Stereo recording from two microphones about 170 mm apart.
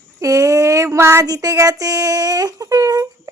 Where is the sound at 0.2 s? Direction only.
20° right (ahead or behind).